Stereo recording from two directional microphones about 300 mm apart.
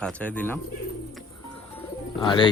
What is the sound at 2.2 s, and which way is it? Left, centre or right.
Speech, centre.